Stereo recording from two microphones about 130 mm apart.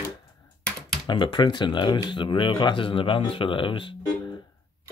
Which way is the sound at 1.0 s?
35° left (ahead or behind).